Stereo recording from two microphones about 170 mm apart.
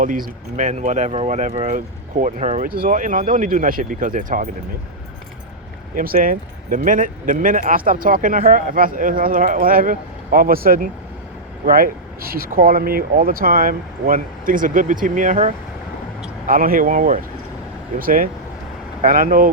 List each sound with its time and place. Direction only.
0.0 s speech: 50° right (ahead or behind)
5.9 s speech: 55° right (ahead or behind)